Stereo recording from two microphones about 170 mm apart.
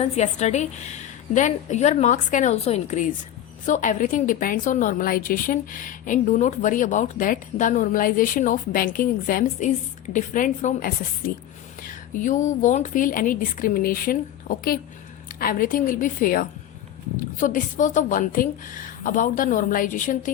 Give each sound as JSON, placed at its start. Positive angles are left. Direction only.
{"t": 0.0, "sound": "a woman's voice", "side_deg": 40}